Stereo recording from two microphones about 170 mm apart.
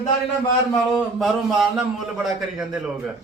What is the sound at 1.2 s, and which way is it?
Speech, centre (ahead or behind).